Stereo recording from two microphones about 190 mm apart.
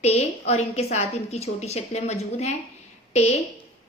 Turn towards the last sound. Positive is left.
turn(degrees=35)  # may be behind; listen again after turning